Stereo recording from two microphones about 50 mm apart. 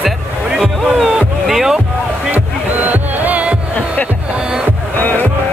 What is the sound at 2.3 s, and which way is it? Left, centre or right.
Music, right.